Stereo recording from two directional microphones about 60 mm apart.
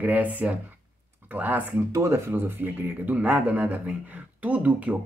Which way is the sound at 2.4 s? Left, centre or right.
Right.